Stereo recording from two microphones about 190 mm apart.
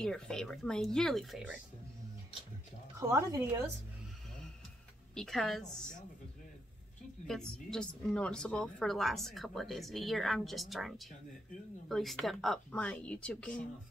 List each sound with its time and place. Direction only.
0.0 s a woman's voice: 5° left (ahead or behind)
3.0 s speech: 15° right (ahead or behind)
5.1 s a woman's voice: 5° left (ahead or behind)
7.2 s a woman's voice: 5° left (ahead or behind)